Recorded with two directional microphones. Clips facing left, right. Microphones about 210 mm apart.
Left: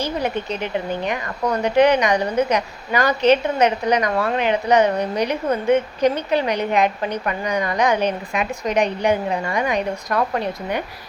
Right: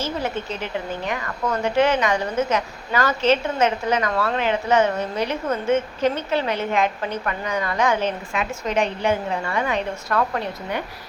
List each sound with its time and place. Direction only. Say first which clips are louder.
0.0 s speech: left 3 dB; 15° left (ahead or behind)